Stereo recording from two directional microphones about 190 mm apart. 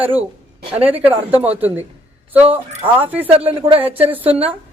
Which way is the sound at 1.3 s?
10° right (ahead or behind).